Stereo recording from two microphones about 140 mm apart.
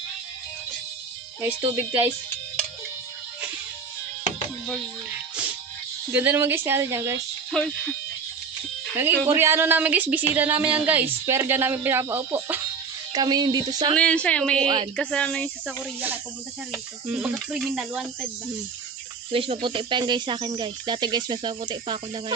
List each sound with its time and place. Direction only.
1.7 s a woman's voice: 15° right (ahead or behind)
6.1 s a woman's voice: 15° right (ahead or behind)
7.5 s a woman's voice: 5° left (ahead or behind)
9.0 s a woman's voice: 15° right (ahead or behind)
13.1 s speech: 30° right (ahead or behind)
13.9 s a woman's voice: 10° left (ahead or behind)
15.6 s a woman's voice: 10° right (ahead or behind)
19.3 s speech: 40° right (ahead or behind)